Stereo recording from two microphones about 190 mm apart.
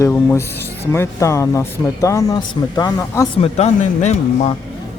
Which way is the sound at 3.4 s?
35° left (ahead or behind).